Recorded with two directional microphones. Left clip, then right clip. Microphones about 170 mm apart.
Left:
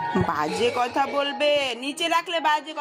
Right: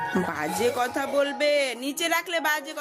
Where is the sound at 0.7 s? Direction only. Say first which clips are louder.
Left 1 dB; 15° right (ahead or behind).